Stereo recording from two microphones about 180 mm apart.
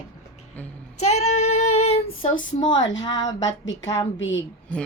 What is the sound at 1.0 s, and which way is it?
A woman's voice, 35° left (ahead or behind).